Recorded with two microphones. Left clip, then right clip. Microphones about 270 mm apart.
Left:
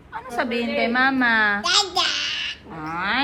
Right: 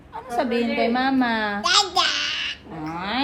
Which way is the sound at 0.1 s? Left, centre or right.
Centre.